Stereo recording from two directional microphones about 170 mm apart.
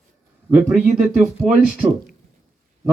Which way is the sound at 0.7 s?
10° right (ahead or behind).